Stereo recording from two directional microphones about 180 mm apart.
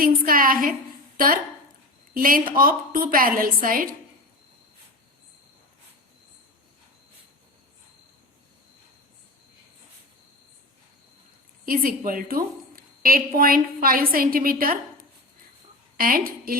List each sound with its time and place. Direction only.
0.0 s a woman's voice: 50° right (ahead or behind)
11.6 s a woman's voice: 50° right (ahead or behind)
16.0 s a woman's voice: 55° right (ahead or behind)